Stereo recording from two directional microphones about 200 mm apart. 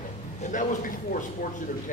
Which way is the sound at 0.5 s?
40° left (ahead or behind).